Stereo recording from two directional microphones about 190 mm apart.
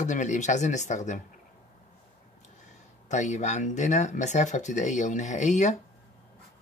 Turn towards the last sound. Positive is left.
turn(degrees=40)  # may be behind; listen again after turning